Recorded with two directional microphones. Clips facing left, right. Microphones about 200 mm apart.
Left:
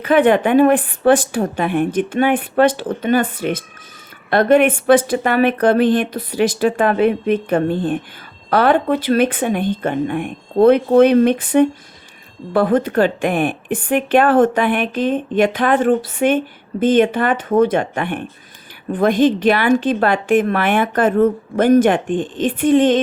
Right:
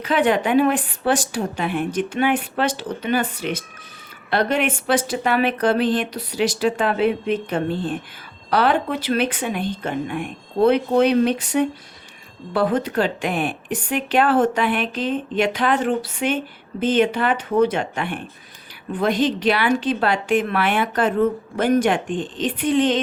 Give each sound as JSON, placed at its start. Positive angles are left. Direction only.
{"t": 0.0, "sound": "a woman's voice", "side_deg": 55}